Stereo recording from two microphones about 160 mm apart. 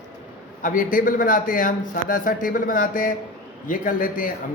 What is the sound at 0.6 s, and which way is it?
A man's voice, 60° left (ahead or behind).